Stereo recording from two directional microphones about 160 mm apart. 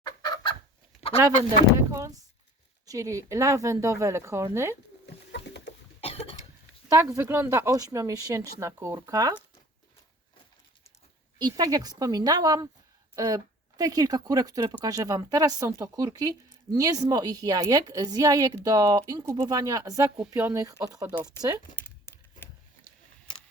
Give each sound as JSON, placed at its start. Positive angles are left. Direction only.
{"t": 0.0, "sound": "chicken", "side_deg": 25}
{"t": 1.9, "sound": "speech", "side_deg": -20}
{"t": 5.0, "sound": "a sound", "side_deg": 90}
{"t": 6.0, "sound": "cough", "side_deg": 35}
{"t": 6.9, "sound": "speech", "side_deg": -15}
{"t": 11.3, "sound": "speech", "side_deg": -25}
{"t": 21.8, "sound": "a sound", "side_deg": 15}